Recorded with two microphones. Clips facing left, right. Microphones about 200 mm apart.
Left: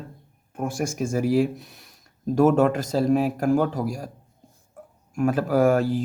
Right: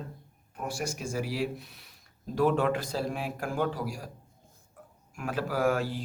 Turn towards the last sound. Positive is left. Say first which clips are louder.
# left 8 dB
turn(degrees=45)  # may be behind; listen again after turning